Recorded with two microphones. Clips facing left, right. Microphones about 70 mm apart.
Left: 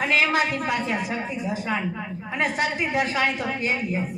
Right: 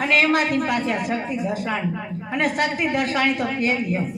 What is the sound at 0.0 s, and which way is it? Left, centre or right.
A woman's voice, right.